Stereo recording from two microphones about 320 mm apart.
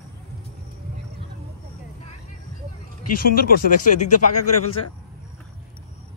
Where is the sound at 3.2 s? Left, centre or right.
Left.